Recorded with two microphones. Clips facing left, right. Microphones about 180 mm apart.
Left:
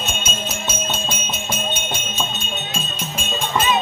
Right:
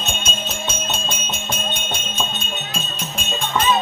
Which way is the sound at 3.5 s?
10° left (ahead or behind).